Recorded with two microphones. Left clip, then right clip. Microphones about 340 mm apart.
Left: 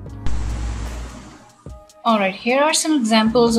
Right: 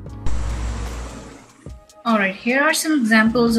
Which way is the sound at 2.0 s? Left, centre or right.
Centre.